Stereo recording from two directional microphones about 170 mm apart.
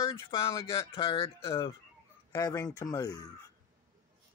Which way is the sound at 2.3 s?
20° left (ahead or behind).